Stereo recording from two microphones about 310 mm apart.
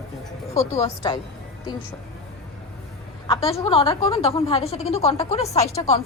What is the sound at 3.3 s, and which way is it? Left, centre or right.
A woman's voice, centre.